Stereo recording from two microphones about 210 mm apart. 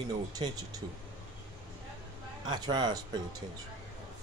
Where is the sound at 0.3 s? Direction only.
20° right (ahead or behind).